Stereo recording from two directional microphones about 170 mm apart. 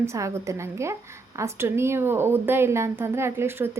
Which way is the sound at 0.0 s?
15° right (ahead or behind).